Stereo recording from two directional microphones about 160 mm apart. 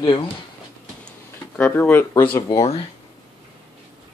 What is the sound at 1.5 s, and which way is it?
Speech, 10° left (ahead or behind).